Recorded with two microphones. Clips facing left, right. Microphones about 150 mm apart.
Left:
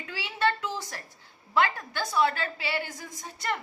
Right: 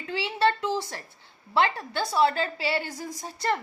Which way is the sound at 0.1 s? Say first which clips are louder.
Right 4 dB; 30° right (ahead or behind).